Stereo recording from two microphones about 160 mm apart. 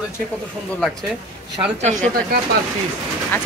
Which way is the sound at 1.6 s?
45° right (ahead or behind).